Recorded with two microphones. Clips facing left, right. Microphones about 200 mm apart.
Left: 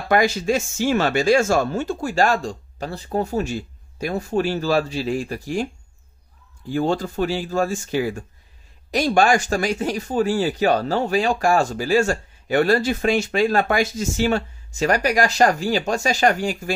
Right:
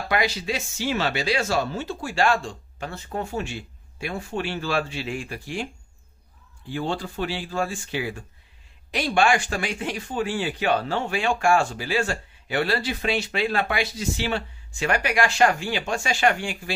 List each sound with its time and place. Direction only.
0.1 s speech: 45° left (ahead or behind)
6.7 s speech: 45° left (ahead or behind)